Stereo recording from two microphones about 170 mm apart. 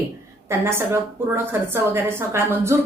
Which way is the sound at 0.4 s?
15° right (ahead or behind).